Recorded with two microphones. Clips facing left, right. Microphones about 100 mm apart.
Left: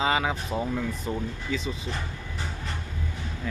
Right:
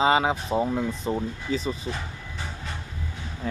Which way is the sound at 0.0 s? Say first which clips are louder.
Right 4 dB; 25° right (ahead or behind).